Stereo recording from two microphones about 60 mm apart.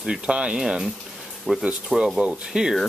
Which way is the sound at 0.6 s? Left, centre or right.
Centre.